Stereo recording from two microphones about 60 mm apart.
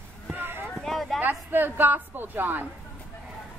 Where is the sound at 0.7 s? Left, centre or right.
Centre.